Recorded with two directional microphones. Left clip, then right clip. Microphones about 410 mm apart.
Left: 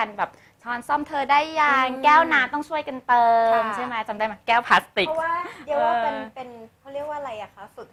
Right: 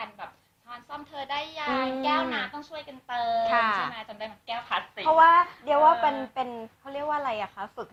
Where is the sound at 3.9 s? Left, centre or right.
Left.